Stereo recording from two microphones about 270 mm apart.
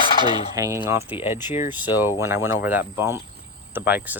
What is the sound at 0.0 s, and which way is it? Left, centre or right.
Fowl, centre.